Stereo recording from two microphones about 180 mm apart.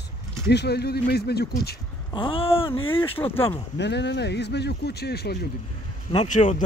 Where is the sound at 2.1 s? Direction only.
30° left (ahead or behind).